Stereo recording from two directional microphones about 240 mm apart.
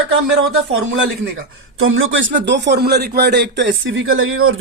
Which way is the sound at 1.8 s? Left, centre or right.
Right.